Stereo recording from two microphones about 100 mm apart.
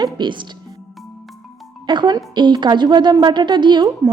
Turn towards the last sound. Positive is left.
turn(degrees=-40)  # may be behind; listen again after turning